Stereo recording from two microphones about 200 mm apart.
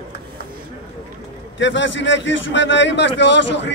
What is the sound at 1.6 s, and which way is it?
A man's voice, 65° left (ahead or behind).